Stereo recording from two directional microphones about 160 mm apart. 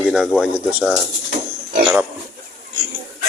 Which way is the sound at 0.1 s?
Centre (ahead or behind).